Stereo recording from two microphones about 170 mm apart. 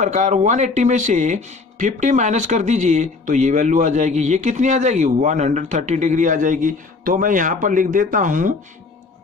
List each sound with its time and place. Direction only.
0.0 s speech: 45° right (ahead or behind)